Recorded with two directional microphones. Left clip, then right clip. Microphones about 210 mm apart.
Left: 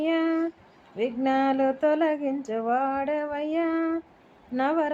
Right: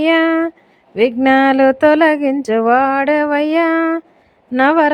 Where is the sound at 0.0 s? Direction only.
55° right (ahead or behind).